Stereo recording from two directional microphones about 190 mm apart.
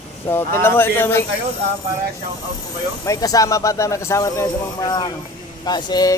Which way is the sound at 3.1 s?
20° left (ahead or behind).